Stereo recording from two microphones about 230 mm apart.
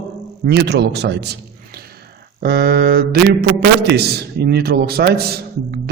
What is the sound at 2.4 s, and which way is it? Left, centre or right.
A man's voice, right.